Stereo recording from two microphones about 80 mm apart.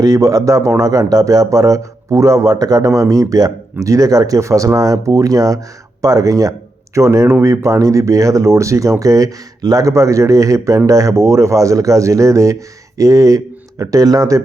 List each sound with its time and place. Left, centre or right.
0.0 s a man's voice: right